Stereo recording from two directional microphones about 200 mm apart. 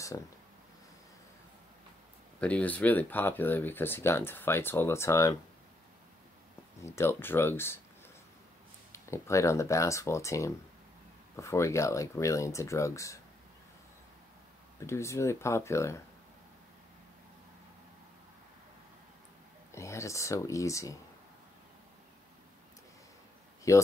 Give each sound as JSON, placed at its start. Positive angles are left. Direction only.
{"t": 0.1, "sound": "speech", "side_deg": 15}
{"t": 2.4, "sound": "speech", "side_deg": 5}
{"t": 6.8, "sound": "speech", "side_deg": 15}
{"t": 8.9, "sound": "speech", "side_deg": 15}
{"t": 14.8, "sound": "speech", "side_deg": 15}
{"t": 19.7, "sound": "speech", "side_deg": 15}
{"t": 23.7, "sound": "speech", "side_deg": 15}